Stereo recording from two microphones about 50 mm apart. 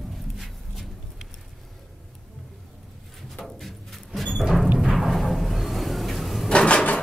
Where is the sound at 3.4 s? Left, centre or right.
Centre.